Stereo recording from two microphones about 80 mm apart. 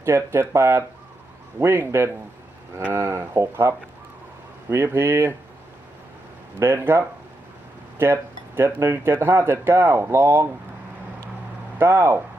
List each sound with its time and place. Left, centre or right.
0.0 s speech: right
6.6 s speech: right
11.8 s speech: right